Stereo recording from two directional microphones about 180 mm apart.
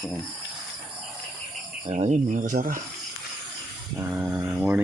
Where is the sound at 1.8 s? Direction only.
35° right (ahead or behind).